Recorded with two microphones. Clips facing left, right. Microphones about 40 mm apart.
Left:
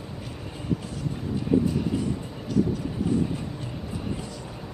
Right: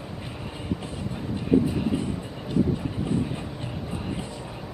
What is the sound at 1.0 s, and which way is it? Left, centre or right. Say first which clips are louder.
Vehicle: left 1 dB; right.